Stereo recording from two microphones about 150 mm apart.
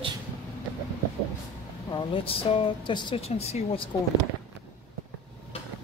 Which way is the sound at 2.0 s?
40° left (ahead or behind).